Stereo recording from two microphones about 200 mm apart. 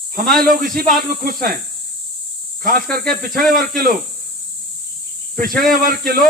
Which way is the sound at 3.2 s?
45° right (ahead or behind).